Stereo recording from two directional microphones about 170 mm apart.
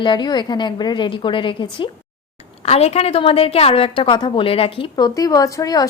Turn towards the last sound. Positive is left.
turn(degrees=20)  # may be behind; listen again after turning